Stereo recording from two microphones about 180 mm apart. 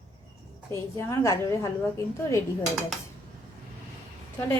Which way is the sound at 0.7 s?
15° left (ahead or behind).